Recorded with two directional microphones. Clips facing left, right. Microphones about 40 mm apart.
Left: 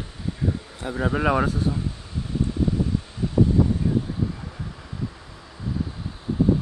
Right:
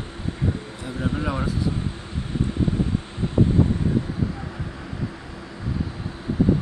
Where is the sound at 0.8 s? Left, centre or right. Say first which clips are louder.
Left 4 dB; left.